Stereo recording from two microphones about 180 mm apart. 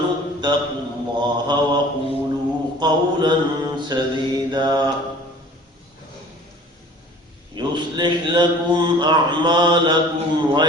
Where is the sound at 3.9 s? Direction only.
25° right (ahead or behind).